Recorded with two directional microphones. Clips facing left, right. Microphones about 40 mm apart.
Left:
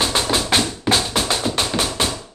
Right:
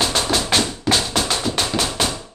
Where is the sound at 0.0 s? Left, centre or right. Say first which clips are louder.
Even; centre.